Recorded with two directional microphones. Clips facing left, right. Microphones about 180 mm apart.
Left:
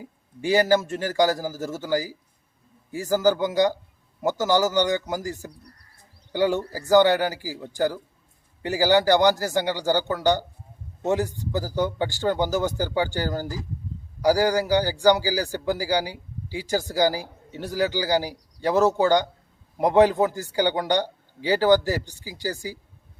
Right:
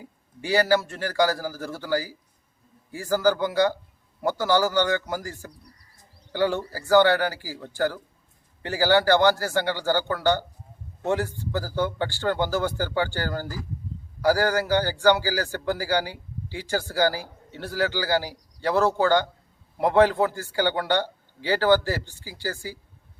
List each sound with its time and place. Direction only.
0.0 s a man's voice: 15° left (ahead or behind)